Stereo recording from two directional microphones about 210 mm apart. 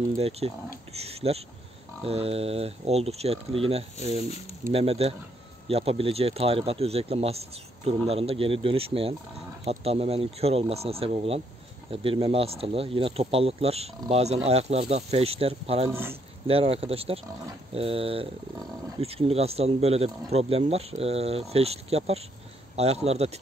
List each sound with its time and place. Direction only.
0.2 s speech: 30° right (ahead or behind)
15.9 s speech: 10° right (ahead or behind)
16.4 s speech: 25° right (ahead or behind)